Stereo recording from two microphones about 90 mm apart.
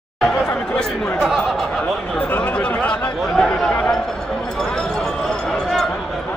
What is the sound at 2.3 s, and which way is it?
Chatter, 15° left (ahead or behind).